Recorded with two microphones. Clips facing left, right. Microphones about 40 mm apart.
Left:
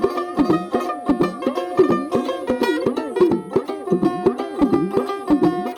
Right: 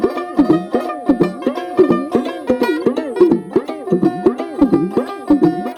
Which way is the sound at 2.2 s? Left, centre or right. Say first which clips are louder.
Right 3 dB; right.